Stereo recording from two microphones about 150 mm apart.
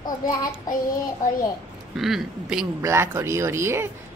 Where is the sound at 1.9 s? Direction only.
Centre (ahead or behind).